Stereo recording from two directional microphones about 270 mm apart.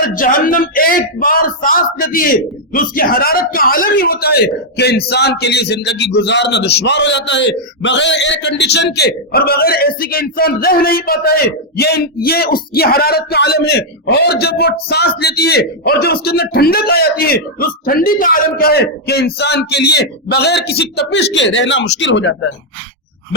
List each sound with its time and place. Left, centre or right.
0.1 s speech: left